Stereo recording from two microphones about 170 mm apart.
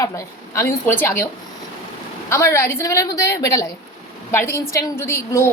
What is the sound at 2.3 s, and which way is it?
A woman's voice, 15° left (ahead or behind).